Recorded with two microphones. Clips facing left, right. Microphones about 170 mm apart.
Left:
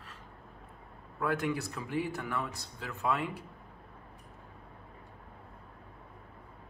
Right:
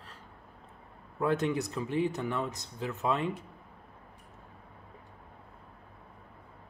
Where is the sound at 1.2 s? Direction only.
20° right (ahead or behind).